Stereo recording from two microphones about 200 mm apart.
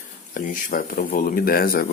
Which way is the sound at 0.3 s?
40° left (ahead or behind).